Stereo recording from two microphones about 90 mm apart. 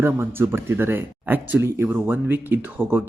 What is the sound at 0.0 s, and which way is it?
Speech, 25° right (ahead or behind).